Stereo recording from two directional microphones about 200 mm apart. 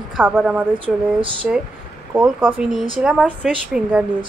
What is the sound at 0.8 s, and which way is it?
Speech, 25° right (ahead or behind).